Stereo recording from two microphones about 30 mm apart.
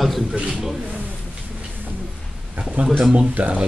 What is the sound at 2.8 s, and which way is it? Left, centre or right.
Speech, right.